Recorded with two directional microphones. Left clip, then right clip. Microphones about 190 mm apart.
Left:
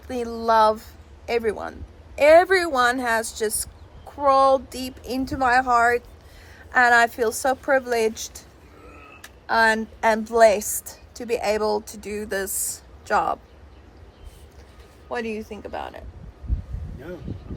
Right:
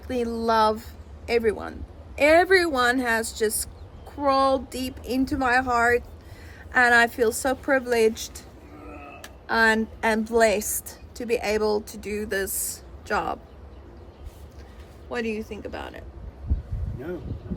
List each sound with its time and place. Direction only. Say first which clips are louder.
0.1 s a woman's voice: left 3 dB; 10° left (ahead or behind)
9.5 s a woman's voice: left 2 dB; 5° left (ahead or behind)
15.1 s a woman's voice: left 1 dB; 20° left (ahead or behind)